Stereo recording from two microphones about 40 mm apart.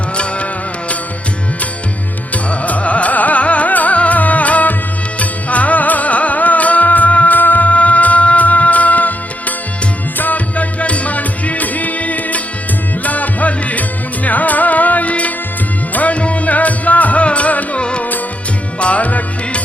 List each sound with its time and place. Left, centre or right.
2.3 s music: left
10.2 s music: left
17.7 s music: left